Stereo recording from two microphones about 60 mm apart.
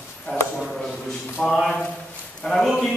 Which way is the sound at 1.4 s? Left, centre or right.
Centre.